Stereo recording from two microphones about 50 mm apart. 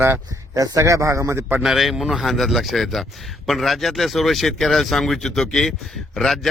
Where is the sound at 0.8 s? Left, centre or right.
Right.